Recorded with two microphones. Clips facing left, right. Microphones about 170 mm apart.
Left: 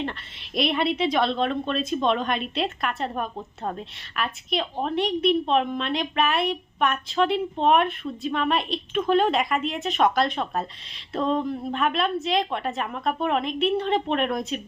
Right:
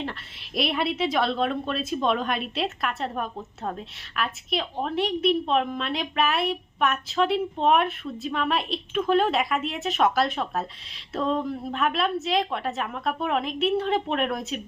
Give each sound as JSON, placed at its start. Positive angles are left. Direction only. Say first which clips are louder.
{"t": 0.0, "sound": "a woman's voice", "louder": "left 2 dB", "side_deg": 0}